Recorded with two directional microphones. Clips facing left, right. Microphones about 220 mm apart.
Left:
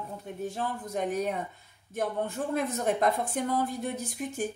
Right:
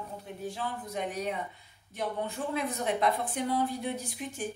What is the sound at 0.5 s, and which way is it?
Speech, 45° left (ahead or behind).